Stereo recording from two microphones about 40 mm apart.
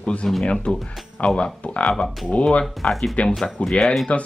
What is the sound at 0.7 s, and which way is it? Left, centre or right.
Speech, centre.